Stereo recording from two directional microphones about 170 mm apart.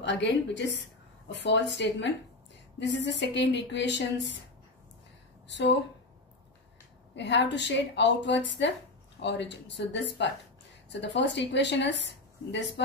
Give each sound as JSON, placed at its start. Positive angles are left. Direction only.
{"t": 0.0, "sound": "a woman's voice", "side_deg": 90}
{"t": 5.5, "sound": "a woman's voice", "side_deg": 90}
{"t": 7.2, "sound": "a woman's voice", "side_deg": 90}